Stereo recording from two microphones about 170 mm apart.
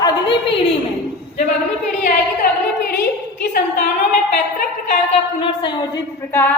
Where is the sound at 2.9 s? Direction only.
65° left (ahead or behind).